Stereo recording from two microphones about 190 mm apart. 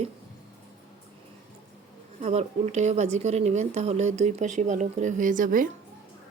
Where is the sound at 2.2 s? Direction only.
35° right (ahead or behind).